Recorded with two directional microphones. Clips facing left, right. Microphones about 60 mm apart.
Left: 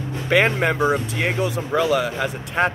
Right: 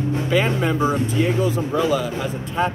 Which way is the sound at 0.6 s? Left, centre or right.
Left.